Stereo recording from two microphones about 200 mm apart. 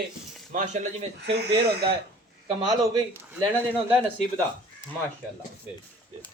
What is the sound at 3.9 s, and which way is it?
Speech, 10° right (ahead or behind).